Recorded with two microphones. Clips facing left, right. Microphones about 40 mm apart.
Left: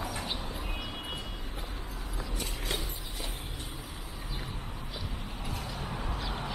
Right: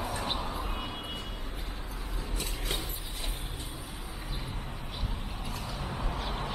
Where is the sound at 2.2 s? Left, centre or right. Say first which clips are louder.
Even; right.